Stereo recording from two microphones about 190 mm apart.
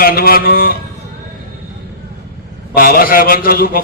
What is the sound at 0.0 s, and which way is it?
Speech, 50° left (ahead or behind).